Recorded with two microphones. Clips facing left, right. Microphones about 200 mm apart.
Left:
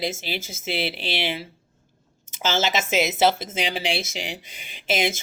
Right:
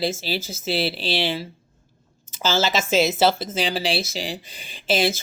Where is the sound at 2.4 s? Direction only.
20° left (ahead or behind).